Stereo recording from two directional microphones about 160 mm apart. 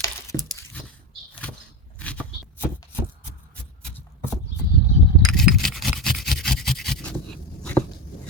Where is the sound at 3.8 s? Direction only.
10° left (ahead or behind).